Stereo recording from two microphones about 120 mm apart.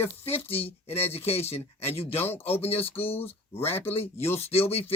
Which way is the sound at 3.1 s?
15° left (ahead or behind).